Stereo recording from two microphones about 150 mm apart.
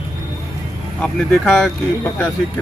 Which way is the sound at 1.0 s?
10° left (ahead or behind).